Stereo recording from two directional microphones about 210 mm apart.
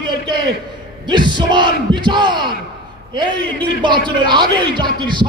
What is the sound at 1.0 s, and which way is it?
Speech, 20° right (ahead or behind).